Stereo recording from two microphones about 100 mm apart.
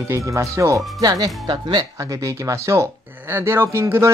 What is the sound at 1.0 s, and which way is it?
Speech, 45° right (ahead or behind).